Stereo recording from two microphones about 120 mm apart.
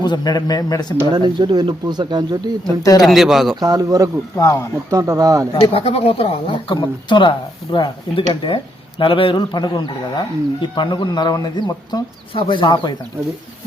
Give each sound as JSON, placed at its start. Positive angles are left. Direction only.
{"t": 0.0, "sound": "speech", "side_deg": 35}
{"t": 1.1, "sound": "speech", "side_deg": -35}
{"t": 3.0, "sound": "speech", "side_deg": 0}
{"t": 3.5, "sound": "speech", "side_deg": -30}
{"t": 4.4, "sound": "speech", "side_deg": 25}
{"t": 4.9, "sound": "speech", "side_deg": -25}
{"t": 5.5, "sound": "speech", "side_deg": 45}